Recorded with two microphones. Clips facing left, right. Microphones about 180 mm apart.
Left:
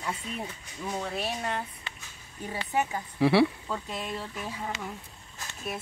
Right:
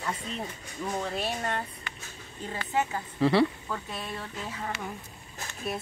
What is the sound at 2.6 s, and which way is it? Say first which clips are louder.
Speech: even; 15° left (ahead or behind).